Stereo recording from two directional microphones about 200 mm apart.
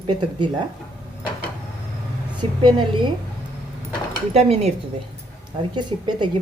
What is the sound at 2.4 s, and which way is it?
Speech, 25° right (ahead or behind).